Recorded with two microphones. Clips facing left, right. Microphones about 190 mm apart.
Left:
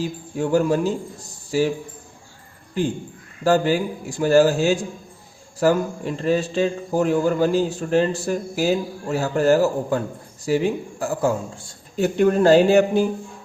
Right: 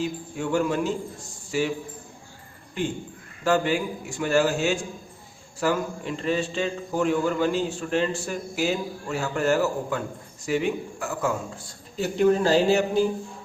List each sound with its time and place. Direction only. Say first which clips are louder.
0.0 s a man's voice: left 4 dB; 35° left (ahead or behind)
3.4 s a man's voice: left 4 dB; 35° left (ahead or behind)
11.9 s speech: left 3 dB; 55° left (ahead or behind)